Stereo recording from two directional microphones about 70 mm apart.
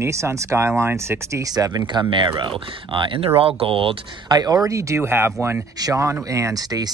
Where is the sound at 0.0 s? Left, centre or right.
Right.